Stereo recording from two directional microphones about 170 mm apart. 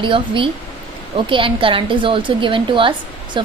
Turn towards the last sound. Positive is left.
turn(degrees=-30)  # may be behind; listen again after turning